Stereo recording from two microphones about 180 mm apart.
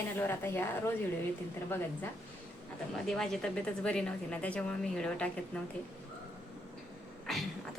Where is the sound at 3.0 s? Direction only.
5° left (ahead or behind).